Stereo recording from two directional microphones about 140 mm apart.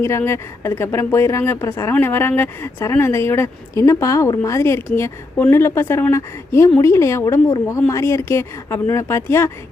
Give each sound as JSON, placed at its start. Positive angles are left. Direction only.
{"t": 0.0, "sound": "speech", "side_deg": 20}